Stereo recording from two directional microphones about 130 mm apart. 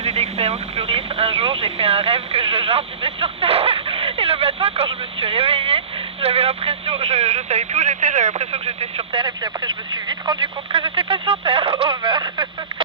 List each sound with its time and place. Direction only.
0.0 s speech: 55° right (ahead or behind)
9.2 s speech: 35° right (ahead or behind)